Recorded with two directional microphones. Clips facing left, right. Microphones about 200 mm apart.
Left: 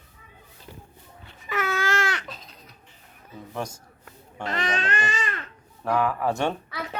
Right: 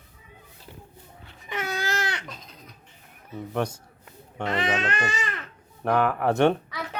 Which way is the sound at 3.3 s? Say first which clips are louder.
Right 5 dB; 65° right (ahead or behind).